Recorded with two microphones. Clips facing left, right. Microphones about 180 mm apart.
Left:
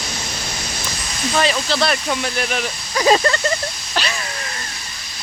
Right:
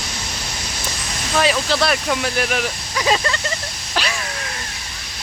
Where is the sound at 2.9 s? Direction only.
40° left (ahead or behind).